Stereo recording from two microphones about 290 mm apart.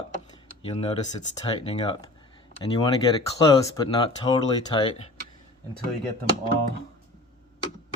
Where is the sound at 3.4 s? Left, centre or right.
Centre.